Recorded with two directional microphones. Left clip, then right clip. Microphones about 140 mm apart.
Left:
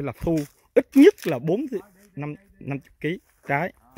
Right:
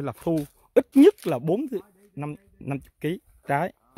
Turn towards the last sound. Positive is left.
turn(degrees=-25)  # may be behind; listen again after turning